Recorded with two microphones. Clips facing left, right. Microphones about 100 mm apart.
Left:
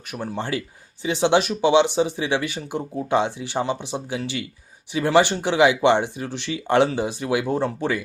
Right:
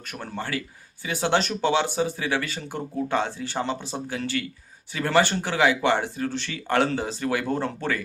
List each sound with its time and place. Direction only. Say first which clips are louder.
0.3 s speech: left 1 dB; 25° left (ahead or behind)